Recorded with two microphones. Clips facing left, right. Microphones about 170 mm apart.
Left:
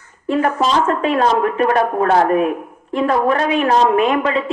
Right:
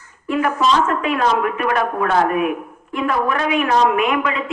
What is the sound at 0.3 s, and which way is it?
A woman's voice, 35° left (ahead or behind).